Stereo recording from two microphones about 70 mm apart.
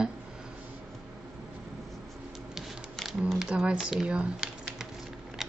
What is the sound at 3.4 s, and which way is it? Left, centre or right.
A woman's voice, centre.